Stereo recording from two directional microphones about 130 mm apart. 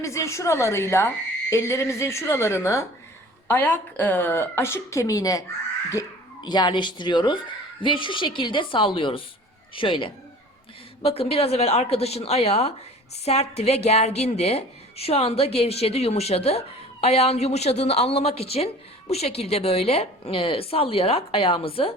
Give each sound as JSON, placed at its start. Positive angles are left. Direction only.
{"t": 0.0, "sound": "a woman's voice", "side_deg": 25}